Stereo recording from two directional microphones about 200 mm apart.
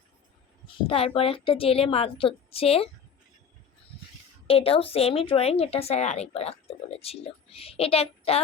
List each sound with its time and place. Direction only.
0.9 s speech: 30° left (ahead or behind)
4.4 s speech: 30° left (ahead or behind)